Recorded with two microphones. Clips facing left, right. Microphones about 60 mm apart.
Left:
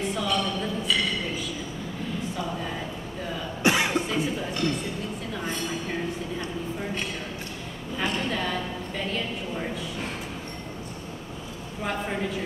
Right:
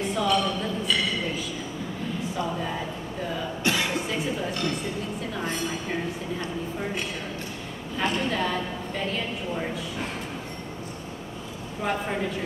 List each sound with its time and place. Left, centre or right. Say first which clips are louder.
0.0 s a sound: right 3 dB; centre
3.6 s cough: left 4 dB; left
3.9 s music: left 2 dB; centre
5.3 s train: right 1 dB; centre
8.0 s a sound: right 2 dB; centre
11.8 s a woman's voice: right 2 dB; centre